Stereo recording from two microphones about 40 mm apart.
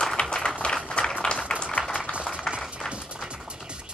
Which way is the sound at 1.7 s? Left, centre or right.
Left.